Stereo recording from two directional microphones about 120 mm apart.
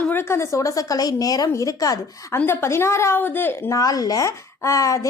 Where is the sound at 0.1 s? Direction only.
20° left (ahead or behind).